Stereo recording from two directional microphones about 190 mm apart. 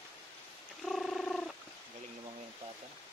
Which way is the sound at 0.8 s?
Centre (ahead or behind).